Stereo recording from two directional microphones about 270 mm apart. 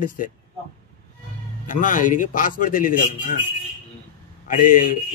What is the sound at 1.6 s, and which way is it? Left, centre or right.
A man's voice, left.